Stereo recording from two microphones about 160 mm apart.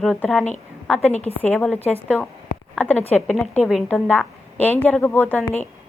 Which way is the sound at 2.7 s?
10° left (ahead or behind).